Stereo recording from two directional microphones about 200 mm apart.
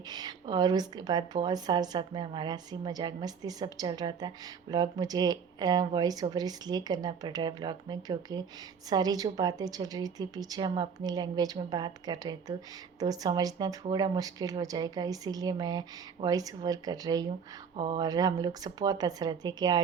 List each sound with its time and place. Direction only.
0.1 s a woman's voice: 20° right (ahead or behind)